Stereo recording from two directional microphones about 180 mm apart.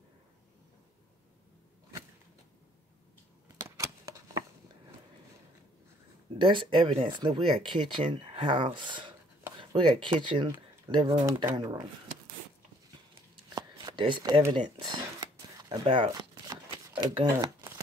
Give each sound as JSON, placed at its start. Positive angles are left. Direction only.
{"t": 3.6, "sound": "a sound", "side_deg": -15}
{"t": 6.3, "sound": "speech", "side_deg": -30}
{"t": 13.6, "sound": "shuffling cards", "side_deg": -25}
{"t": 14.5, "sound": "speech", "side_deg": -25}
{"t": 15.7, "sound": "shuffling cards", "side_deg": -25}